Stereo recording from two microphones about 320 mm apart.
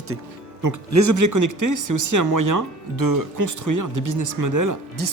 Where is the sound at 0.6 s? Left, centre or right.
Right.